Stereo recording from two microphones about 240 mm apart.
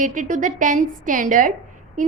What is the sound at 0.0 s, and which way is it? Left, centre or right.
A woman's voice, right.